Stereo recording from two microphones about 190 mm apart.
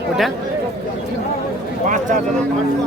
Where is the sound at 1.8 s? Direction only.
45° right (ahead or behind).